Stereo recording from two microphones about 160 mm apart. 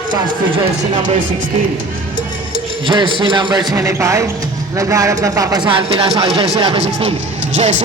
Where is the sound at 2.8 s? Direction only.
30° right (ahead or behind).